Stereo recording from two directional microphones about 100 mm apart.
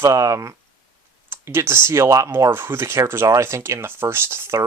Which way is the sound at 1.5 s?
25° right (ahead or behind).